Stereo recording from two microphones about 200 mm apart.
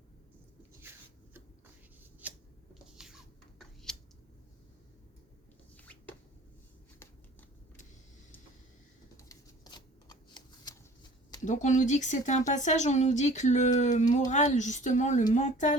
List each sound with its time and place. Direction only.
0.8 s a sound: 10° right (ahead or behind)
2.2 s scissors: 5° right (ahead or behind)
3.0 s a sound: centre (ahead or behind)
5.7 s drip: 5° left (ahead or behind)
9.1 s shuffling cards: 20° left (ahead or behind)
11.4 s a woman's voice: 40° left (ahead or behind)